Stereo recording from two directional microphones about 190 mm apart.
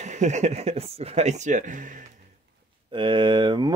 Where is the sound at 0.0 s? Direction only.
40° right (ahead or behind).